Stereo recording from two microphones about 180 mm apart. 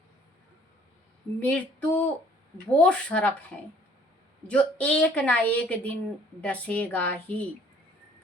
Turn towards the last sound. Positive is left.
turn(degrees=10)  # may be behind; listen again after turning